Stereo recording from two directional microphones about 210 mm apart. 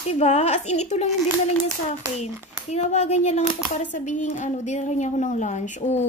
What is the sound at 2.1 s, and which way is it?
Speech, 30° left (ahead or behind).